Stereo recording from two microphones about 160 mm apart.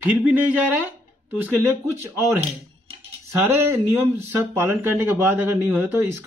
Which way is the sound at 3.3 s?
15° right (ahead or behind).